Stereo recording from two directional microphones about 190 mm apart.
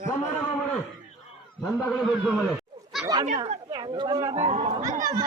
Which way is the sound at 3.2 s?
35° right (ahead or behind).